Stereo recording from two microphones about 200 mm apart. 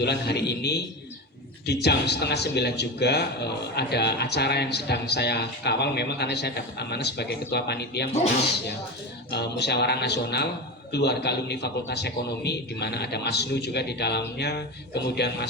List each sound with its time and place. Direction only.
0.0 s speech: 55° left (ahead or behind)
9.3 s speech: 55° left (ahead or behind)